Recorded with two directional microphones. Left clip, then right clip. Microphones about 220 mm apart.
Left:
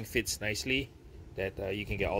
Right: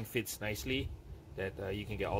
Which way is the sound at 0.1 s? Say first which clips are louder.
Left 5 dB; 10° left (ahead or behind).